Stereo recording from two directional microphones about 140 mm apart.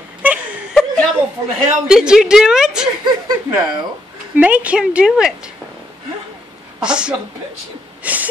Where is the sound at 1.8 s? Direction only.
5° right (ahead or behind).